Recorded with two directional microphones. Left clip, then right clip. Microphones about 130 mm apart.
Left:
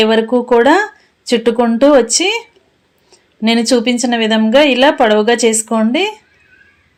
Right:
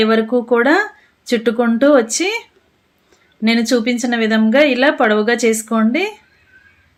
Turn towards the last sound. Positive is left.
turn(degrees=15)  # may be behind; listen again after turning